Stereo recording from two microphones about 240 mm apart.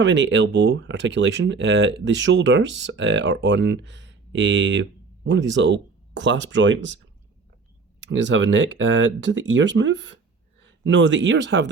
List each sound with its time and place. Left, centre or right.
0.0 s speech: right
8.0 s speech: right